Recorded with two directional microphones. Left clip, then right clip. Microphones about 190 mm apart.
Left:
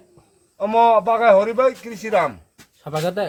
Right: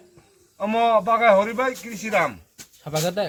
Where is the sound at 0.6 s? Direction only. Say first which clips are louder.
Left 5 dB; 65° left (ahead or behind).